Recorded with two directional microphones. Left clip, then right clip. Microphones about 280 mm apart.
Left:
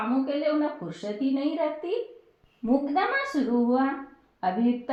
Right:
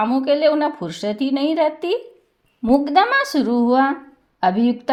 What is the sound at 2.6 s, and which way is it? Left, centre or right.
Speech, right.